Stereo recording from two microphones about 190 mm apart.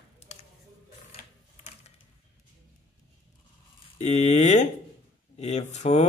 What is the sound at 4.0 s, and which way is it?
Speech, 35° left (ahead or behind).